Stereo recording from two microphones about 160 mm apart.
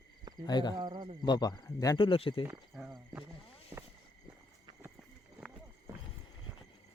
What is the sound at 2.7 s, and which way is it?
Speech, 5° right (ahead or behind).